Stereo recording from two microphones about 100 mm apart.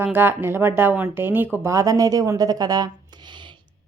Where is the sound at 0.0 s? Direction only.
20° right (ahead or behind).